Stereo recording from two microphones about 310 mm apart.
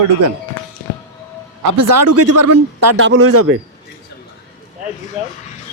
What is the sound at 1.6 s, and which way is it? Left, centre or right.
A man's voice, right.